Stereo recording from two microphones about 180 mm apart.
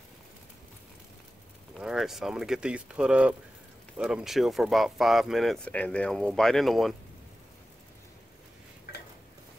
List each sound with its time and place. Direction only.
1.8 s speech: centre (ahead or behind)